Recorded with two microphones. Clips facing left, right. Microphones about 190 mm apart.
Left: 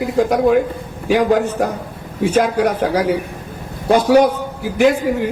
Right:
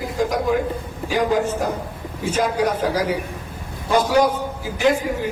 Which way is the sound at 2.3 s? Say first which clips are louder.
Left 4 dB; 60° left (ahead or behind).